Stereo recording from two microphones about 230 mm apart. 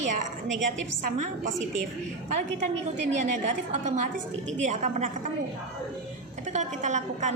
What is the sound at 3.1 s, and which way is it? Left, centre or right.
A woman's voice, right.